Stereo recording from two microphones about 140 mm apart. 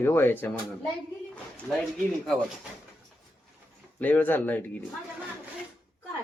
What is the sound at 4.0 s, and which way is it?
Speech, 15° left (ahead or behind).